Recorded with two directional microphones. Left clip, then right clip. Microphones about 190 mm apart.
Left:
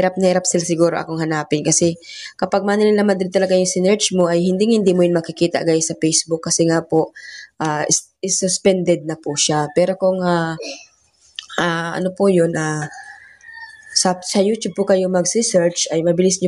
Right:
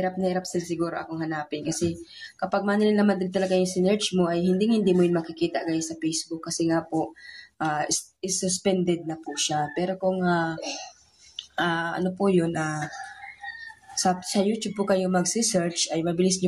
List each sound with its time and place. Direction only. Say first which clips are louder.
0.0 s speech: left 11 dB; 45° left (ahead or behind)
13.9 s speech: left 8 dB; 35° left (ahead or behind)